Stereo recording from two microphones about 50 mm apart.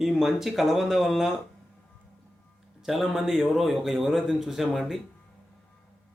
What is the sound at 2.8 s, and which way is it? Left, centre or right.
Speech, centre.